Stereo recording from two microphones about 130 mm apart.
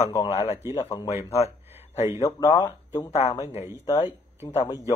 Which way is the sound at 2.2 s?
25° left (ahead or behind).